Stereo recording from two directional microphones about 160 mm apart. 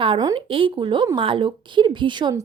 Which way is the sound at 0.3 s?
35° right (ahead or behind).